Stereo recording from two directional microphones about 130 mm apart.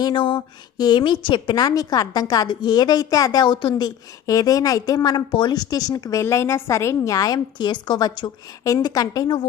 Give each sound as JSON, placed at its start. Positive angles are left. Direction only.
{"t": 0.0, "sound": "a woman's voice", "side_deg": 35}